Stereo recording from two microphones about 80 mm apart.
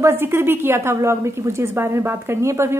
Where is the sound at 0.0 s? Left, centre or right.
Right.